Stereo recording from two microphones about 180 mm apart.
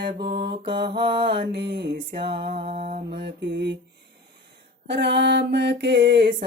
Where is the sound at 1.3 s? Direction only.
75° right (ahead or behind).